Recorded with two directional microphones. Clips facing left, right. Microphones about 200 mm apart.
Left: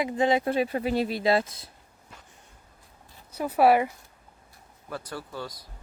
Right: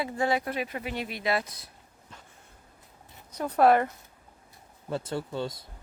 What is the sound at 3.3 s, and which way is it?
Speech, 5° left (ahead or behind).